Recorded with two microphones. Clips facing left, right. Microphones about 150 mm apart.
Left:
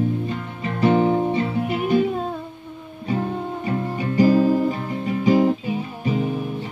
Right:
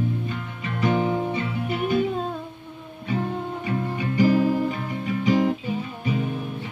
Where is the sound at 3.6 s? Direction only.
40° left (ahead or behind).